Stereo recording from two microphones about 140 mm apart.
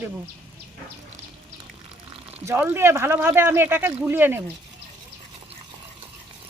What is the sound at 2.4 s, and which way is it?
Speech, 20° right (ahead or behind).